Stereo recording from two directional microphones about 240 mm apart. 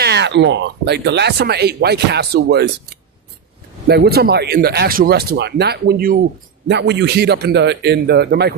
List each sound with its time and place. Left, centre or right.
0.0 s speech: right